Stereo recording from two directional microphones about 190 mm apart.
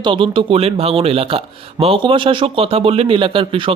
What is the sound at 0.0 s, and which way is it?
A man's voice, 25° right (ahead or behind).